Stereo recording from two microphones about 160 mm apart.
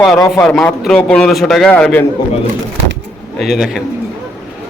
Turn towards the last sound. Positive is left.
turn(degrees=0)  # may be behind; listen again after turning